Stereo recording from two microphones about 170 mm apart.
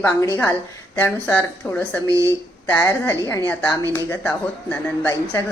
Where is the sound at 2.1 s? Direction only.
20° right (ahead or behind).